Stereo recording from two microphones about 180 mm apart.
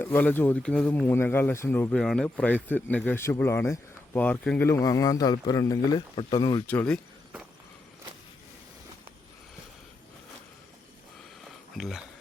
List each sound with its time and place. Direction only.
0.0 s speech: 10° left (ahead or behind); by 6.6 s 25° left (ahead or behind)
6.7 s speech: 5° left (ahead or behind)
11.8 s speech: centre (ahead or behind)